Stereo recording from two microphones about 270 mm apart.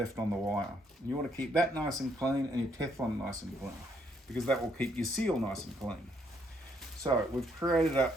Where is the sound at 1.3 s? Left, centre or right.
Centre.